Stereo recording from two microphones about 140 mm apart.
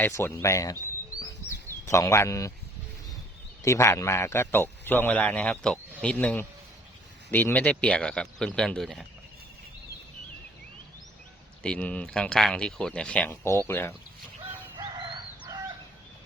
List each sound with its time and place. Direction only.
0.0 s speech: 15° left (ahead or behind)
1.9 s speech: 20° left (ahead or behind)
3.6 s a man's voice: 20° left (ahead or behind); by 9.0 s 5° left (ahead or behind)
11.6 s a man's voice: 10° left (ahead or behind)
14.9 s chicken: 35° right (ahead or behind)